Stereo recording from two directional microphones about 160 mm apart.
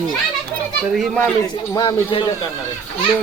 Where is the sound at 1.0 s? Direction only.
5° left (ahead or behind).